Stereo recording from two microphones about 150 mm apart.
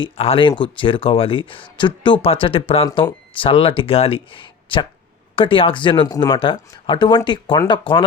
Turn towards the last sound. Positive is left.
turn(degrees=35)  # may be behind; listen again after turning